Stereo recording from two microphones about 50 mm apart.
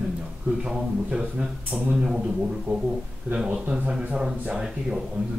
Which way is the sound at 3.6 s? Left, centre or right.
Right.